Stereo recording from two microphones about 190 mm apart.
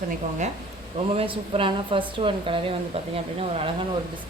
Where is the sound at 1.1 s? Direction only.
30° right (ahead or behind).